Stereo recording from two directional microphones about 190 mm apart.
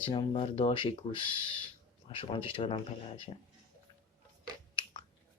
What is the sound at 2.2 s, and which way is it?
Speech, 30° left (ahead or behind).